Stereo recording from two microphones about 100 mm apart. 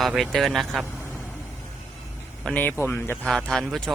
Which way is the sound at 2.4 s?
15° left (ahead or behind).